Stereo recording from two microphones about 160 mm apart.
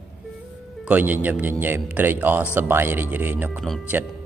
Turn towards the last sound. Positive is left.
turn(degrees=-10)  # may be behind; listen again after turning